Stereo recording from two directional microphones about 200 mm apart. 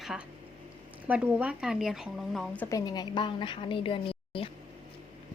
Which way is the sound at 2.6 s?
20° left (ahead or behind).